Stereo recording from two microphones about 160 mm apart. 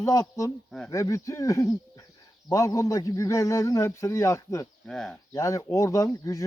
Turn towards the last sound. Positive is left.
turn(degrees=20)  # may be behind; listen again after turning